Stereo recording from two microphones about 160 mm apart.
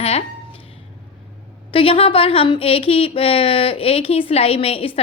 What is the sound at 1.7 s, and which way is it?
Speech, 35° left (ahead or behind).